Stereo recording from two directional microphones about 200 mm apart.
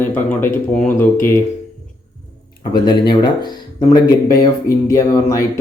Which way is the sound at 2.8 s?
20° left (ahead or behind).